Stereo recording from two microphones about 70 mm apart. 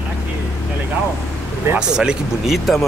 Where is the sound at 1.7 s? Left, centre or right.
Centre.